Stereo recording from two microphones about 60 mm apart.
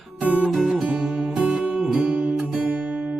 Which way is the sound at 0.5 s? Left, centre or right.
Centre.